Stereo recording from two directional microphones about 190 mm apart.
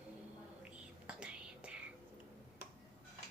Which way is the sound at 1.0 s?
5° right (ahead or behind).